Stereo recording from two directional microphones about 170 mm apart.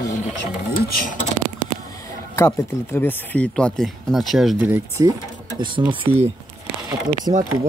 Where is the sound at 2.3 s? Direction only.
15° left (ahead or behind); by 5.0 s 10° right (ahead or behind).